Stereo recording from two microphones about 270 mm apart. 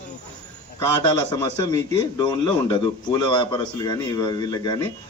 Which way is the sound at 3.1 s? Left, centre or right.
Centre.